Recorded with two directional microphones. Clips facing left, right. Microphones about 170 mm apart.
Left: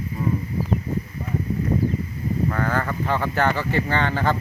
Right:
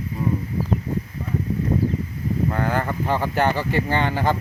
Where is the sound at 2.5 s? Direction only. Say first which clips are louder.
Right 1 dB; 20° right (ahead or behind).